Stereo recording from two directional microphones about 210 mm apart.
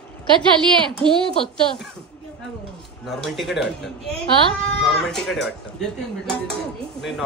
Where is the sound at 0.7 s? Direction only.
25° right (ahead or behind).